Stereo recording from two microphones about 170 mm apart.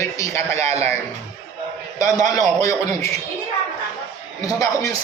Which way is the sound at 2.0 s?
20° left (ahead or behind).